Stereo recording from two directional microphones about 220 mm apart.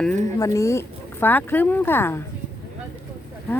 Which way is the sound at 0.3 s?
15° left (ahead or behind).